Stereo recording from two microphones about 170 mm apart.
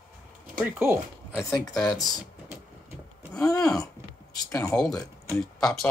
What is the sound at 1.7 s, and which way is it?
Speech, centre (ahead or behind).